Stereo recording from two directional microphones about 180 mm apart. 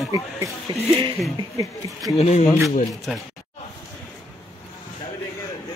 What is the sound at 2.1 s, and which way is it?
Speech, 35° left (ahead or behind).